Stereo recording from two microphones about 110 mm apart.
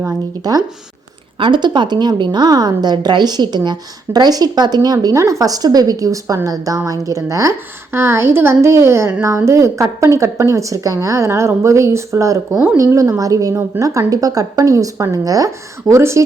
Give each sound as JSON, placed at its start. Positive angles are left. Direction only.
{"t": 0.4, "sound": "a woman's voice", "side_deg": -35}
{"t": 1.4, "sound": "a woman's voice", "side_deg": -45}